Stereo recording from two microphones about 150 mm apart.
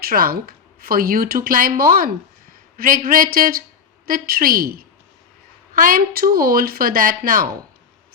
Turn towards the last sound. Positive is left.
turn(degrees=-65)  # may be behind; listen again after turning